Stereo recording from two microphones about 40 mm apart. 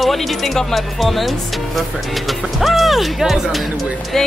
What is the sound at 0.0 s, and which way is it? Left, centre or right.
Speech, centre.